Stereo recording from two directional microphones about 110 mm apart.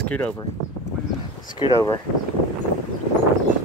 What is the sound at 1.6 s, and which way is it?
Speech, 50° left (ahead or behind).